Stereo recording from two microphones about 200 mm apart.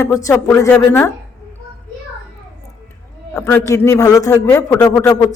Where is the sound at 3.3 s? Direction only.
15° left (ahead or behind).